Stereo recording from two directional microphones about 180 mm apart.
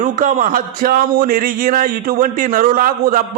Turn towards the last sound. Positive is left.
turn(degrees=-50)  # may be behind; listen again after turning